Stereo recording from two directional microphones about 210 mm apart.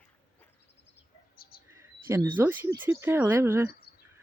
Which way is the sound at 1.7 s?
15° right (ahead or behind).